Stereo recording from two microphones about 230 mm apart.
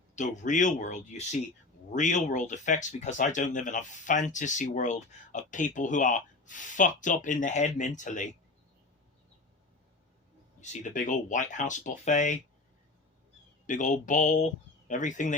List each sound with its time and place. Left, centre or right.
0.2 s speech: left
10.6 s speech: left
13.7 s speech: left